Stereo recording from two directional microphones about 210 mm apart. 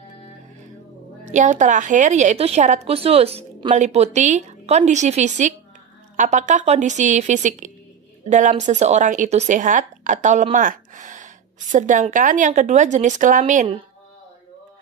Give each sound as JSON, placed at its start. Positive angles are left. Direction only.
{"t": 1.2, "sound": "speech", "side_deg": -35}